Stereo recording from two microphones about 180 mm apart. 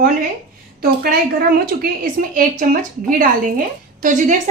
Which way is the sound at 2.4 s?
50° right (ahead or behind).